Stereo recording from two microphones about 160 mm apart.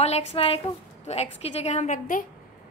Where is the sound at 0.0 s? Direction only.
40° left (ahead or behind).